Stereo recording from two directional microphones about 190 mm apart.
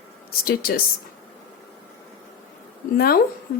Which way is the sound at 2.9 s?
55° left (ahead or behind).